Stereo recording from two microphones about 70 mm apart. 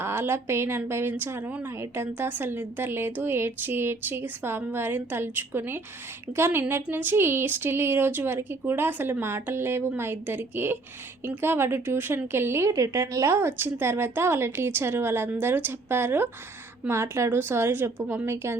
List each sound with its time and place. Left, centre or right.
0.0 s speech: right
12.7 s speech: right